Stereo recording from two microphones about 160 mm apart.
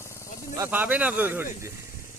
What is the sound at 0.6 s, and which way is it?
Speech, 10° right (ahead or behind).